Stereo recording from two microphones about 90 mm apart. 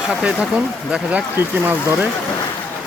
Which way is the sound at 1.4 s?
25° right (ahead or behind).